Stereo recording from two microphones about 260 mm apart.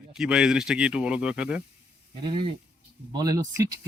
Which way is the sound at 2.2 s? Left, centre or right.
Centre.